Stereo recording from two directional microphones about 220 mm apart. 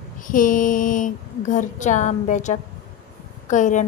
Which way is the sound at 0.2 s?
35° left (ahead or behind).